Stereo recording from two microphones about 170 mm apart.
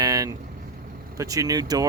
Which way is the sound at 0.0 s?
20° right (ahead or behind).